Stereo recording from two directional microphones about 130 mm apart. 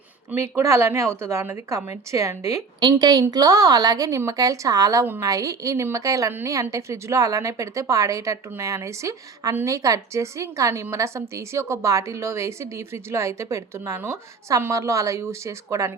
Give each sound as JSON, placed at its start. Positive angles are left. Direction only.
{"t": 0.3, "sound": "a woman's voice", "side_deg": -20}